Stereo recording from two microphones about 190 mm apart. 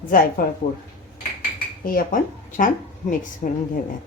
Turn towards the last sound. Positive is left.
turn(degrees=40)  # may be behind; listen again after turning